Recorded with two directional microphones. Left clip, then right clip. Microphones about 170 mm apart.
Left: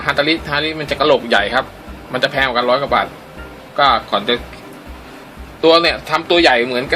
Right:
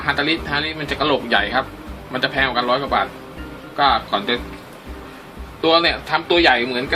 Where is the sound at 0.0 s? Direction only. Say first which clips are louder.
Left 4 dB; 45° left (ahead or behind).